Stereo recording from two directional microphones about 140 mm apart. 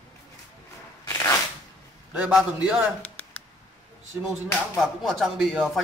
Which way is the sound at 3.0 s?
10° left (ahead or behind).